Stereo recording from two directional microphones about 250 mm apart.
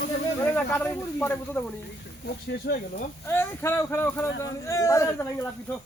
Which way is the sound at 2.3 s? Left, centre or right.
Left.